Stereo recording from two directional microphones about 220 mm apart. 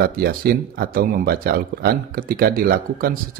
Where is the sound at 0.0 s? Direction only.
40° right (ahead or behind).